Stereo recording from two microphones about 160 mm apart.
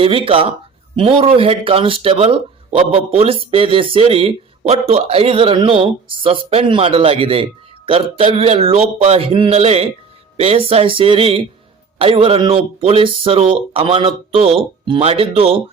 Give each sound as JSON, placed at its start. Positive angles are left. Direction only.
{"t": 0.0, "sound": "speech", "side_deg": -35}